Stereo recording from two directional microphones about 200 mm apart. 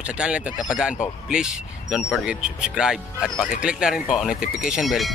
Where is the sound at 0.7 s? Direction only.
5° right (ahead or behind).